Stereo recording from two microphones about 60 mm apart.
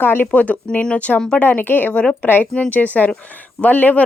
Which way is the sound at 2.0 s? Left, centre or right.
Centre.